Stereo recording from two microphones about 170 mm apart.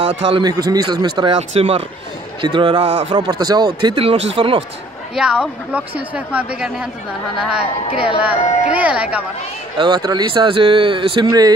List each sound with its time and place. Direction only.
0.2 s speech: 25° right (ahead or behind)
5.1 s a woman's voice: 5° right (ahead or behind)
9.8 s speech: 25° right (ahead or behind)